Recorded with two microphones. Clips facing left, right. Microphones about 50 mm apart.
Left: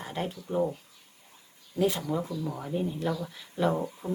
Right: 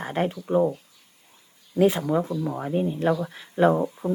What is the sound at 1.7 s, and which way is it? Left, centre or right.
Speech, right.